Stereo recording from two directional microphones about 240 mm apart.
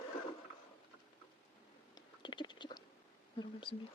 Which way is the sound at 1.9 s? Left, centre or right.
Centre.